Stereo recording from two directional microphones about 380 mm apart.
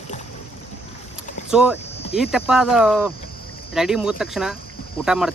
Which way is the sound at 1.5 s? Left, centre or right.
Centre.